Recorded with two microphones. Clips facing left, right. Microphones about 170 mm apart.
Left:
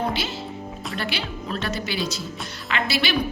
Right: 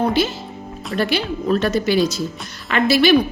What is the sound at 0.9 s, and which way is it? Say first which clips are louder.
A woman's voice: right 11 dB; 45° right (ahead or behind).